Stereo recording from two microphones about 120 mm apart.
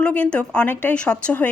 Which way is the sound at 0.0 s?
10° left (ahead or behind).